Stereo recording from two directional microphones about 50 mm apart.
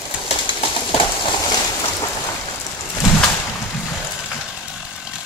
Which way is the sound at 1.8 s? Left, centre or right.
Left.